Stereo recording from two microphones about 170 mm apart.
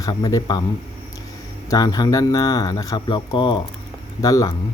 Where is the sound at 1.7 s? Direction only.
20° left (ahead or behind).